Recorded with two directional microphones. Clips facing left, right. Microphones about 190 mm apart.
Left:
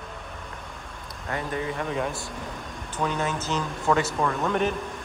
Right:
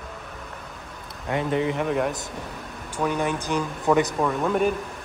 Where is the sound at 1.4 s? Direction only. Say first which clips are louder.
Right 7 dB; 80° right.